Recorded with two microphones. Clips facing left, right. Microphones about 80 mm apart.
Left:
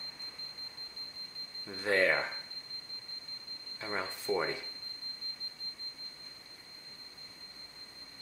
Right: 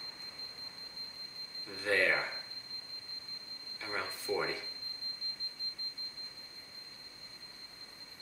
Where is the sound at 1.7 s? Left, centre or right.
Left.